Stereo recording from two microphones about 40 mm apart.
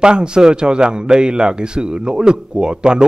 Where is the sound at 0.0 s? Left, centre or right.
Right.